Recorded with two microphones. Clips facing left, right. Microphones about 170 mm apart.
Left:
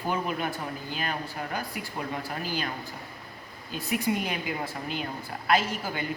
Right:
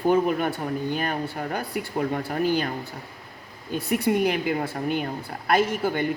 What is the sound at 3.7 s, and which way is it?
Speech, 60° right (ahead or behind).